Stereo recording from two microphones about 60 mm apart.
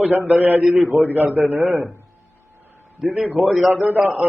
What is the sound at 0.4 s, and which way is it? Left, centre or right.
Speech, right.